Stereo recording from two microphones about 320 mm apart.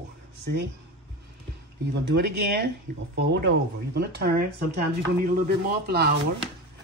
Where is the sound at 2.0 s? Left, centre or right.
Right.